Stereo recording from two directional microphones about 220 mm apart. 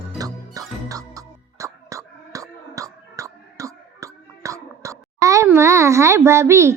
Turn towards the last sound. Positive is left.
turn(degrees=-10)  # may be behind; listen again after turning